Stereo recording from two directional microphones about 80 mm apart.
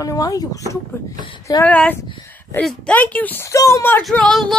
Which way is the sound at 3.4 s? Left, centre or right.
Left.